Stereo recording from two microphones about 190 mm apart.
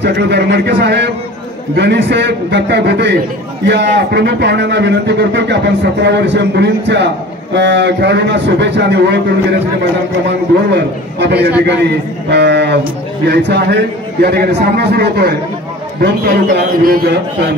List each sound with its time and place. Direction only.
0.0 s a man's voice: 60° right (ahead or behind)
10.7 s a man's voice: 60° right (ahead or behind)